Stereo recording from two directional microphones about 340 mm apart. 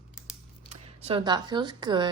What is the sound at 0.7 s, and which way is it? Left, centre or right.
Speech, centre.